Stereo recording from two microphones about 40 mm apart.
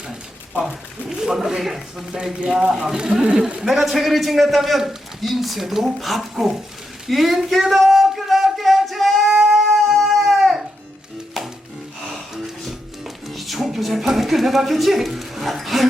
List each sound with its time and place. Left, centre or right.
0.6 s speech: centre
2.4 s speech: right
3.6 s a man's voice: centre
7.1 s a sound: centre
11.4 s music: centre
13.2 s speech: centre